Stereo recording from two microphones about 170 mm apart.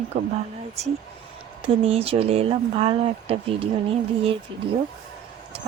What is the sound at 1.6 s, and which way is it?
Speech, 35° right (ahead or behind).